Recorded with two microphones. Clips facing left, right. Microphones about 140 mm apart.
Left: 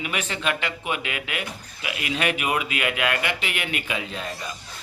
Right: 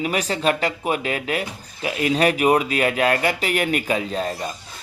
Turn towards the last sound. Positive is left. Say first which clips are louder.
# right 7 dB
turn(degrees=-40)  # may be behind; listen again after turning